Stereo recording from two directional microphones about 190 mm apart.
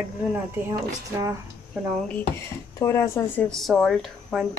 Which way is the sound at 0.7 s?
15° right (ahead or behind).